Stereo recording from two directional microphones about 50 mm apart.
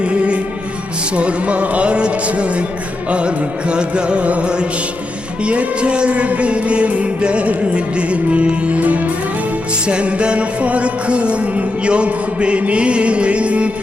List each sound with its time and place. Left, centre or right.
0.0 s music: right